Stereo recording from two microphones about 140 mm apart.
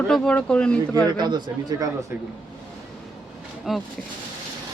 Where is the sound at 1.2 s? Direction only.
30° right (ahead or behind).